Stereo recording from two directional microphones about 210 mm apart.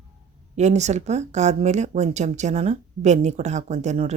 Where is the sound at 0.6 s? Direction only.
35° right (ahead or behind).